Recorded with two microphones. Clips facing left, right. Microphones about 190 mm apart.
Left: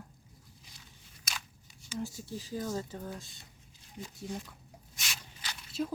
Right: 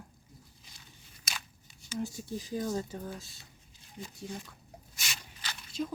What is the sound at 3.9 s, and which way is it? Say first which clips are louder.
Speech: left 1 dB; centre (ahead or behind).